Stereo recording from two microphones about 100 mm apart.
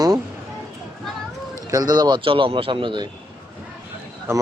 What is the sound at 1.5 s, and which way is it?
Speech, 35° right (ahead or behind).